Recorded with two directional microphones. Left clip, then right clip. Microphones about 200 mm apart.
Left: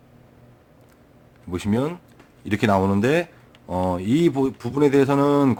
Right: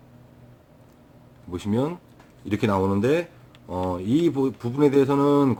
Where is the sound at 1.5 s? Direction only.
40° left (ahead or behind).